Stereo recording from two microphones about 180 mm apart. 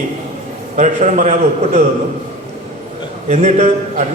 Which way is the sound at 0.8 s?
40° right (ahead or behind).